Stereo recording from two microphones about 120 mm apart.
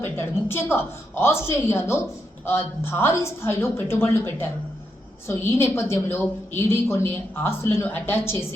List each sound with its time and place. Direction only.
0.0 s a woman's voice: 20° left (ahead or behind)